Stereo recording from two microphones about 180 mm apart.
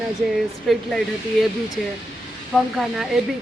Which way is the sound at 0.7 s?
Centre (ahead or behind).